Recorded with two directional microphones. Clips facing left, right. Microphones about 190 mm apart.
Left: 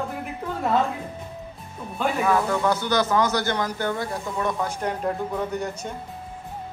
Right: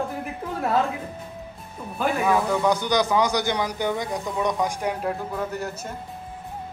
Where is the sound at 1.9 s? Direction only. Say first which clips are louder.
Even; 10° right (ahead or behind).